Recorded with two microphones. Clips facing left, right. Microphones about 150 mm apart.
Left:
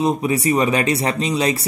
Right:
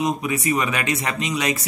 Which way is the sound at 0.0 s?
35° left (ahead or behind).